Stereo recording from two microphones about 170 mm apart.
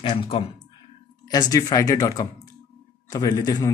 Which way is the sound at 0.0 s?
35° left (ahead or behind).